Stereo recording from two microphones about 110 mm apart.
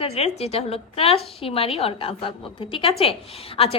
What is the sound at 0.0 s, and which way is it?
A woman's voice, 70° left (ahead or behind).